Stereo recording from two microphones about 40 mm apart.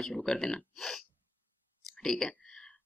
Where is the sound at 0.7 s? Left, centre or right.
Centre.